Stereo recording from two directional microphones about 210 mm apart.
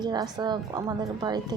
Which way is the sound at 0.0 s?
20° right (ahead or behind).